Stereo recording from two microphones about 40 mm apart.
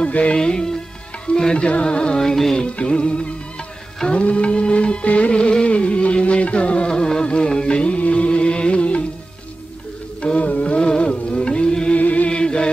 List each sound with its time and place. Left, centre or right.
0.0 s music: left
0.4 s music: centre
2.6 s music: left
6.9 s music: centre
10.2 s music: left
12.0 s music: left
12.3 s chant: left